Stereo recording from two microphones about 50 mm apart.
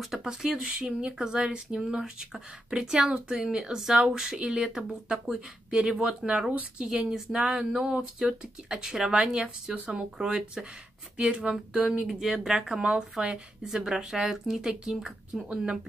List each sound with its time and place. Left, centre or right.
0.0 s speech: centre
0.6 s speech: right
0.8 s speech: centre